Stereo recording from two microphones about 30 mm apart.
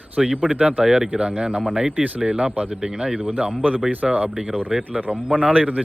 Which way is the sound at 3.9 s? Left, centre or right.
Right.